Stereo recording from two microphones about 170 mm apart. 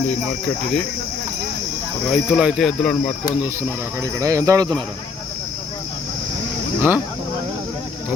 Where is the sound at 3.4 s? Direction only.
15° right (ahead or behind).